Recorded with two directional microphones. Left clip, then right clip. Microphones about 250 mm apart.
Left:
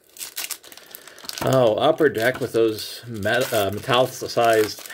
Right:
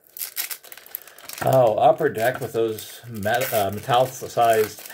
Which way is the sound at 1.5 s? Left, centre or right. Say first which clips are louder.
Right 2 dB; left.